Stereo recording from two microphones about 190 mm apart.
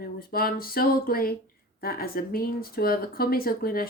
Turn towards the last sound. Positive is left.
turn(degrees=50)  # may be behind; listen again after turning